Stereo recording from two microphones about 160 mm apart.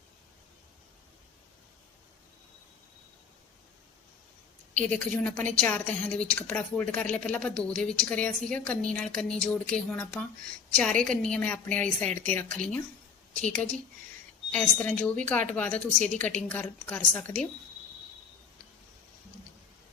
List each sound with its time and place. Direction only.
4.9 s a woman's voice: 10° left (ahead or behind)